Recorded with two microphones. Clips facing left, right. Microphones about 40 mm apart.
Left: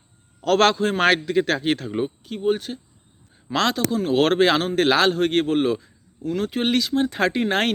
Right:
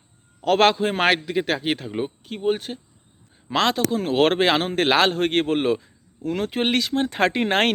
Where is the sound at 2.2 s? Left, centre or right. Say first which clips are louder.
Right 1 dB; right.